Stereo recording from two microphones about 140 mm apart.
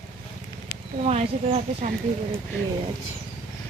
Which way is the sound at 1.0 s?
50° right (ahead or behind).